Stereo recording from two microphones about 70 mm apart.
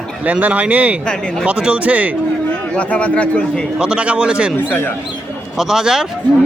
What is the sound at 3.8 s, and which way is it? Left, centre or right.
Speech, centre.